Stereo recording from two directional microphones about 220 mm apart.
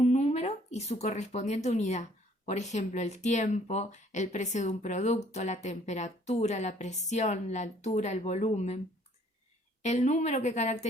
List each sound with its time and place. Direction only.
0.0 s speech: 30° left (ahead or behind)
9.8 s speech: 30° left (ahead or behind)